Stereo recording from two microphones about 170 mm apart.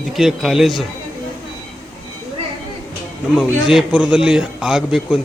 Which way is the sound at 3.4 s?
5° right (ahead or behind).